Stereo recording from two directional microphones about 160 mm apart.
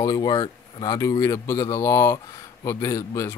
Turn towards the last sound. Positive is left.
turn(degrees=20)  # may be behind; listen again after turning